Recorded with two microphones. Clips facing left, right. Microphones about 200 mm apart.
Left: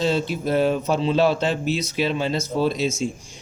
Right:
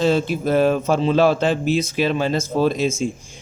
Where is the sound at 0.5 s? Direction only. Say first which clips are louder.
Right 3 dB; 50° right (ahead or behind).